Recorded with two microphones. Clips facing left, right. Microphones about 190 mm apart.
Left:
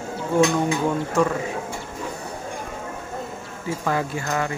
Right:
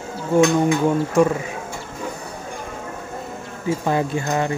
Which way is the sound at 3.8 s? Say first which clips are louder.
Right 2 dB; 25° right (ahead or behind).